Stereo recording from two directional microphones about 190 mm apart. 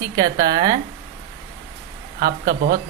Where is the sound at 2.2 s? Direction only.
50° right (ahead or behind).